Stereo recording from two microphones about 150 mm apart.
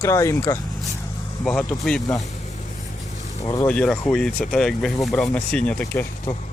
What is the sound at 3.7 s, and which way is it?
Speech, 5° left (ahead or behind).